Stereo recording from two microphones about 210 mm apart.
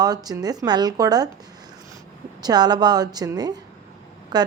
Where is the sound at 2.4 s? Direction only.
20° right (ahead or behind).